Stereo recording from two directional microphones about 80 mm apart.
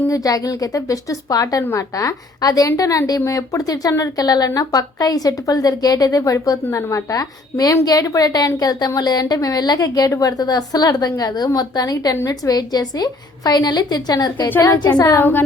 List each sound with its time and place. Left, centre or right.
0.1 s a woman's voice: left
15.2 s a woman's voice: left